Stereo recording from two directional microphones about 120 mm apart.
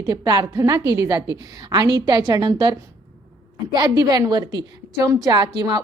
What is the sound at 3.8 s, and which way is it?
A woman's voice, 35° right (ahead or behind).